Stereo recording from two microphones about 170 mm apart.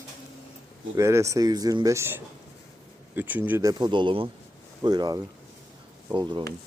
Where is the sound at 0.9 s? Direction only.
15° right (ahead or behind).